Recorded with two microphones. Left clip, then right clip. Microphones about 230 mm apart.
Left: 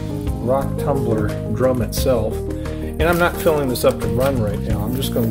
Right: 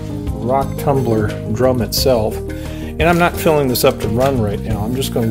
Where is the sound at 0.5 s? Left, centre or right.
Right.